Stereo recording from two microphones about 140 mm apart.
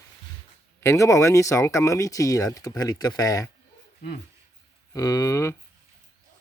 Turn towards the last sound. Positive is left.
turn(degrees=20)  # may be behind; listen again after turning